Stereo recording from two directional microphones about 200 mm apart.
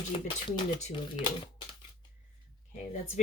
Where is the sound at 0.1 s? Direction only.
25° left (ahead or behind).